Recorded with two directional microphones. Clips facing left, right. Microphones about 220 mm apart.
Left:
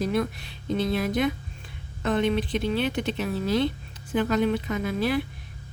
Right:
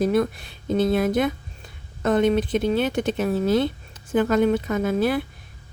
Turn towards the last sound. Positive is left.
turn(degrees=-50)  # may be behind; listen again after turning